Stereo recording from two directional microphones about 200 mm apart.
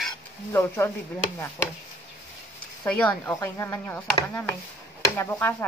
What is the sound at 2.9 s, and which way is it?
Speech, 10° left (ahead or behind).